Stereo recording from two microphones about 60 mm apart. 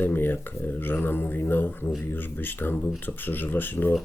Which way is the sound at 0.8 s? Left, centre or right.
Left.